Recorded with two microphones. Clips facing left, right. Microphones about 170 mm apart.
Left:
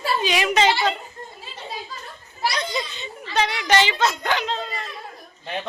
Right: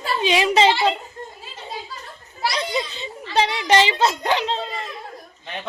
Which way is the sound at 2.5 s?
30° right (ahead or behind).